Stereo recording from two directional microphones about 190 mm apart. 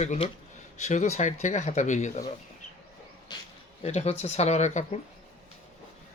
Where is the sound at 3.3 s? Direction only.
20° left (ahead or behind).